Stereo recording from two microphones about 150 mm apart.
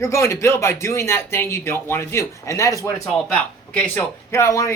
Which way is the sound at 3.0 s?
5° left (ahead or behind).